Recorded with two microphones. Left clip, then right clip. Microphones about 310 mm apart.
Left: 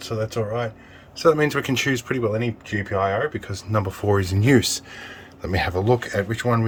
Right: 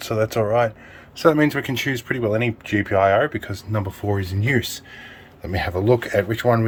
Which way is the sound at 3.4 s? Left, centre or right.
Centre.